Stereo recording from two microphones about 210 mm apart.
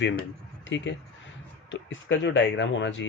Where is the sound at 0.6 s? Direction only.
60° left (ahead or behind).